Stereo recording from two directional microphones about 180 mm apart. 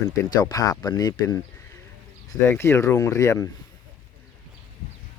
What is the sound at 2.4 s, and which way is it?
Speech, 15° left (ahead or behind).